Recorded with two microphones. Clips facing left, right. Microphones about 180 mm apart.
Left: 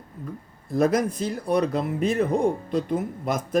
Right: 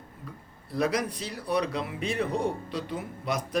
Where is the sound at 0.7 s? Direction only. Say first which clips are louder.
Left 6 dB; 45° left (ahead or behind).